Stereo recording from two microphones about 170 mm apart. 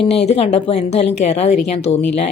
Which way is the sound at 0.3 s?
40° left (ahead or behind).